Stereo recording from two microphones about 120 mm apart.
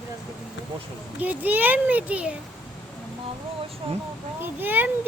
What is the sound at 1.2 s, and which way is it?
A child's voice, 15° right (ahead or behind).